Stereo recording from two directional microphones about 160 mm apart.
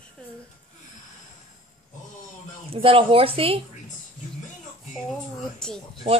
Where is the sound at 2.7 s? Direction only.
35° right (ahead or behind).